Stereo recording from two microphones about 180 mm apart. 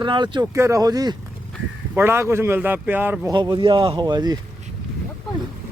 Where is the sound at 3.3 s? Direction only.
25° right (ahead or behind).